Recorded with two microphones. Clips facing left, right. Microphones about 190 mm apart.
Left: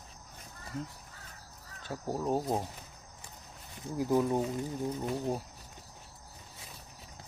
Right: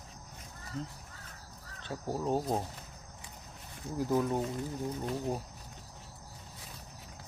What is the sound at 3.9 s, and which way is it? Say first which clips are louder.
Speech: left 2 dB; 10° left (ahead or behind).